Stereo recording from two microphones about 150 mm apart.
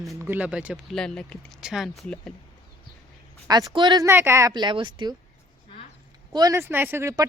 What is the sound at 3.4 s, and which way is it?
A woman's voice, 25° right (ahead or behind).